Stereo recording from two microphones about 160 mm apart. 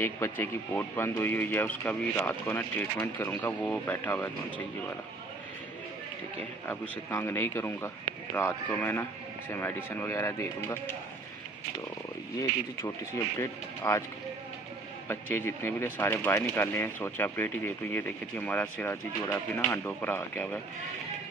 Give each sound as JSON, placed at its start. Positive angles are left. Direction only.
{"t": 0.0, "sound": "speech", "side_deg": 15}
{"t": 7.1, "sound": "speech", "side_deg": 15}
{"t": 12.4, "sound": "speech", "side_deg": 20}
{"t": 15.0, "sound": "speech", "side_deg": 15}